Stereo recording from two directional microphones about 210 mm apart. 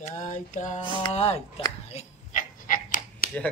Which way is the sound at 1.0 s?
30° left (ahead or behind).